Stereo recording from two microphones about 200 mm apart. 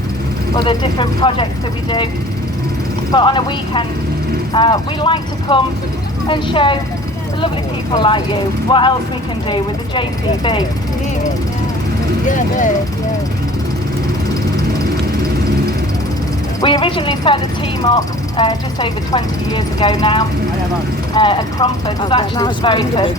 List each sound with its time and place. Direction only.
0.5 s speech: 20° left (ahead or behind)
3.1 s speech: 25° left (ahead or behind)
7.9 s speech: 25° left (ahead or behind)
12.3 s speech: 40° left (ahead or behind)
16.6 s speech: 20° left (ahead or behind)